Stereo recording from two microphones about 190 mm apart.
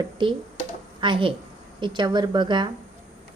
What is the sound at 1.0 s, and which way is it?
Speech, 25° right (ahead or behind).